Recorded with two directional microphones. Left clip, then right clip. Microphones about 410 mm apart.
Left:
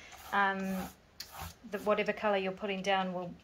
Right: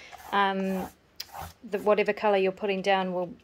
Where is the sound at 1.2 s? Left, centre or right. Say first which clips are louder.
Right 6 dB; centre.